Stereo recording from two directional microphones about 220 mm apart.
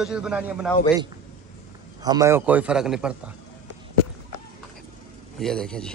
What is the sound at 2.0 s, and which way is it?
A man's voice, 15° right (ahead or behind).